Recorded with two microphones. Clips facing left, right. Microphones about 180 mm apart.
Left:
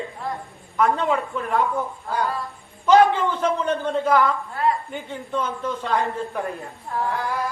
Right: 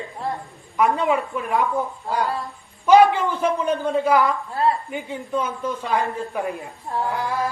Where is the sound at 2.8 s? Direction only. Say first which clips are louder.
Right 2 dB; 10° right (ahead or behind).